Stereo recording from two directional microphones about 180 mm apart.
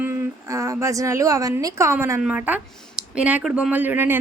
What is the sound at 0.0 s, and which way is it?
A woman's voice, 15° right (ahead or behind).